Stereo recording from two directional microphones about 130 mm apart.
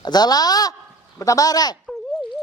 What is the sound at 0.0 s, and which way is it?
Speech, 30° left (ahead or behind).